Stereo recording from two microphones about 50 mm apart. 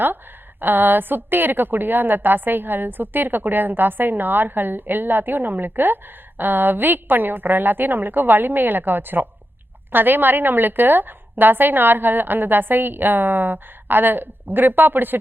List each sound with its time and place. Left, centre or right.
0.6 s a woman's voice: right